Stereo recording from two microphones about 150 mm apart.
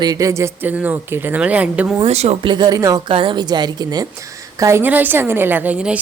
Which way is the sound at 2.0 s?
45° right (ahead or behind).